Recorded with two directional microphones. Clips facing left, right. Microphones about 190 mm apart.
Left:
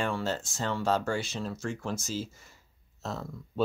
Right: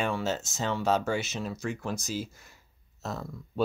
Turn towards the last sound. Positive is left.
turn(degrees=0)  # may be behind; listen again after turning